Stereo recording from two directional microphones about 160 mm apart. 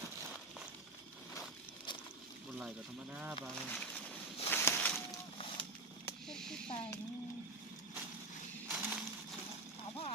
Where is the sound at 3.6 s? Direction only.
5° left (ahead or behind).